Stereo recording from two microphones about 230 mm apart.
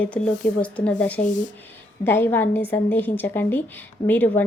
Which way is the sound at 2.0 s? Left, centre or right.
Centre.